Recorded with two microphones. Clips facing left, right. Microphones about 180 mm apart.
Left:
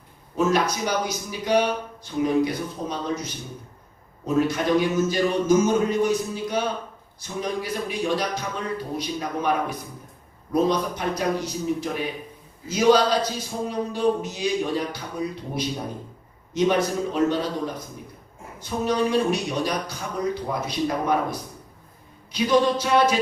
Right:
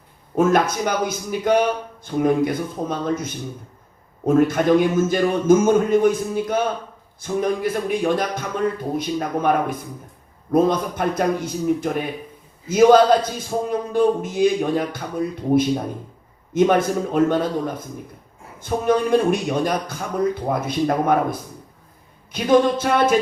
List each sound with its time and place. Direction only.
0.3 s a man's voice: 50° right (ahead or behind)
16.6 s a man's voice: 50° right (ahead or behind)